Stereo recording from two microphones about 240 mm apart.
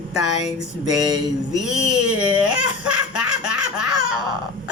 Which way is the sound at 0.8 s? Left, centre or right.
Centre.